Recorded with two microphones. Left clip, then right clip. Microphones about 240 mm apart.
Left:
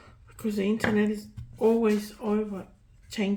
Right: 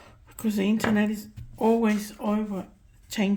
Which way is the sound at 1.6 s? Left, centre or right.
Right.